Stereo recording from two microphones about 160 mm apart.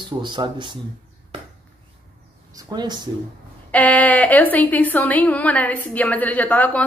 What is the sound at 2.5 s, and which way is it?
Speech, 25° right (ahead or behind).